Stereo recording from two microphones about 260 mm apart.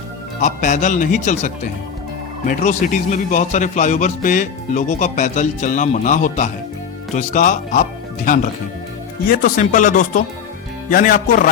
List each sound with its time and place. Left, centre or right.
0.4 s a man's voice: left